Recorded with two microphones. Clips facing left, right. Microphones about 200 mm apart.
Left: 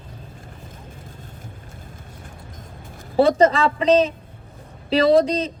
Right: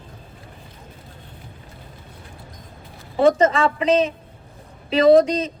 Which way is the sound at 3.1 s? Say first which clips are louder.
Left 1 dB; 35° left (ahead or behind).